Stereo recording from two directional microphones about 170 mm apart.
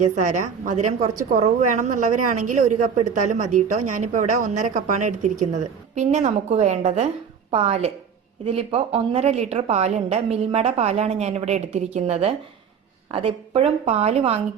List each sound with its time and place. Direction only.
0.0 s a woman's voice: 45° right (ahead or behind)